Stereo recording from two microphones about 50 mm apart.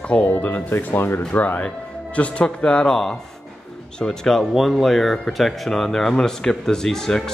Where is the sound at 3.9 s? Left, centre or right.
Centre.